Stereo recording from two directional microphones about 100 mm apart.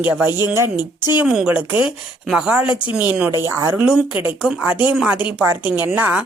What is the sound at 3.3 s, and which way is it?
Speech, 30° right (ahead or behind).